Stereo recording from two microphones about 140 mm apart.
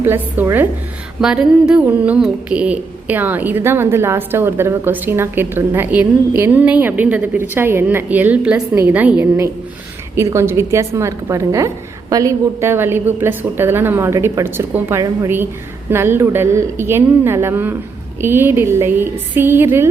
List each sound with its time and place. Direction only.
0.0 s a woman's voice: 15° right (ahead or behind)